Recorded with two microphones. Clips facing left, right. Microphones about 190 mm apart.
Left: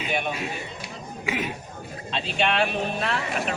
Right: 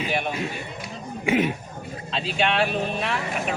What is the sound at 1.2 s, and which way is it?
Speech, 30° right (ahead or behind).